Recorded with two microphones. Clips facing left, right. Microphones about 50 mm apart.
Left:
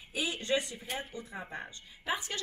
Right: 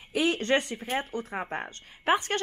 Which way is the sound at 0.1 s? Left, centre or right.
Right.